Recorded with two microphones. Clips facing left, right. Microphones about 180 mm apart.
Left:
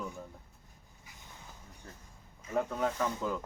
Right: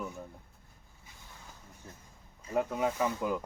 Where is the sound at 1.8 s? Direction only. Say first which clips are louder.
Right 1 dB; 5° right (ahead or behind).